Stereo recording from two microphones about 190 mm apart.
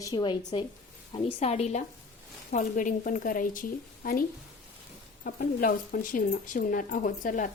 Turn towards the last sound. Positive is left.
turn(degrees=45)  # may be behind; listen again after turning